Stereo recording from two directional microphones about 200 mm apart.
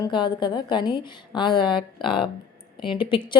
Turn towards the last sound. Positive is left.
turn(degrees=25)  # may be behind; listen again after turning